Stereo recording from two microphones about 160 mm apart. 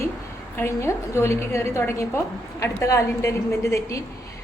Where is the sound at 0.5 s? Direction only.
15° left (ahead or behind).